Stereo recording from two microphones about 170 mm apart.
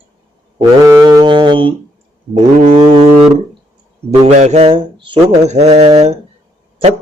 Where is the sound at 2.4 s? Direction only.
40° right (ahead or behind).